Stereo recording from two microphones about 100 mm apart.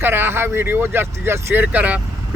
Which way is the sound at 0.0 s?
25° right (ahead or behind).